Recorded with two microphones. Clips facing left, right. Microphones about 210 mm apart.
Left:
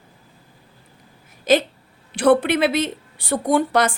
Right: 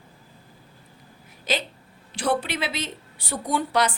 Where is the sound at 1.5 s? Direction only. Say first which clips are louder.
Left 11 dB; 50° left (ahead or behind).